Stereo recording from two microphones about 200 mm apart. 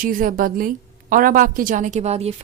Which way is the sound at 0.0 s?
45° right (ahead or behind).